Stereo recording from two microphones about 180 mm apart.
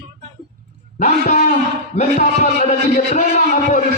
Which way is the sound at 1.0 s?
40° left (ahead or behind).